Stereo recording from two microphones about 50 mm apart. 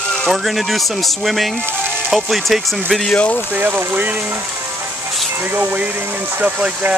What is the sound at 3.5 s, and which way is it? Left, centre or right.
Speech, right.